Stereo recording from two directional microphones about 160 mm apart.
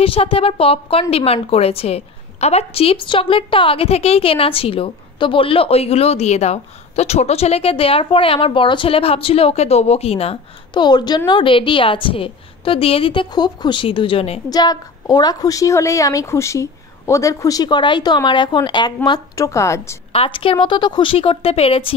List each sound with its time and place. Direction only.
0.0 s a woman's voice: 35° left (ahead or behind)
14.5 s a woman's voice: 25° left (ahead or behind)
20.1 s a woman's voice: 35° left (ahead or behind)